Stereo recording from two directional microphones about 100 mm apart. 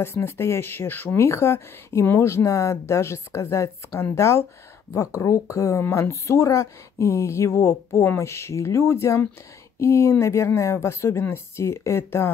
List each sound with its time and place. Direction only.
0.0 s speech: 25° left (ahead or behind)